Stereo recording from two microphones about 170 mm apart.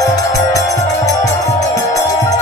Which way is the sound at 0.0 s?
20° left (ahead or behind).